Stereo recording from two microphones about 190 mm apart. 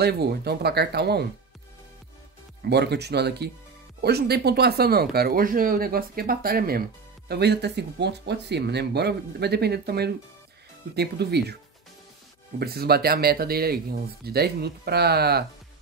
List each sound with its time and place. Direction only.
0.0 s speech: 55° right (ahead or behind)
2.7 s speech: 60° right (ahead or behind)
12.5 s speech: 55° right (ahead or behind)